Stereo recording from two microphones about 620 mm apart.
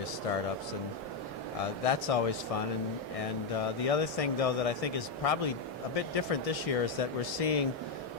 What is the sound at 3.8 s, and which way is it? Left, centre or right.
Speech, left.